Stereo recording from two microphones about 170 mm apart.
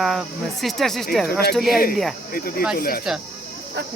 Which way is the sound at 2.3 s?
60° left (ahead or behind).